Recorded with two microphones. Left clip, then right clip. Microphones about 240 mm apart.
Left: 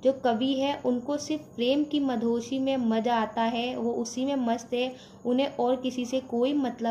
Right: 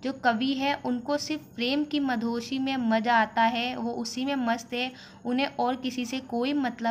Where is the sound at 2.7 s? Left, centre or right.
Right.